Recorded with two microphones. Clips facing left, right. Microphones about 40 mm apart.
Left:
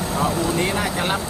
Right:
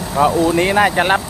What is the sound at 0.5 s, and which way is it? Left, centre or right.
Speech, right.